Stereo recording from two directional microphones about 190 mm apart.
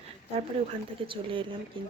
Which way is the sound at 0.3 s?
30° right (ahead or behind).